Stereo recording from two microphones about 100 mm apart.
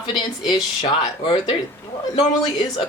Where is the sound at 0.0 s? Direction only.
55° left (ahead or behind).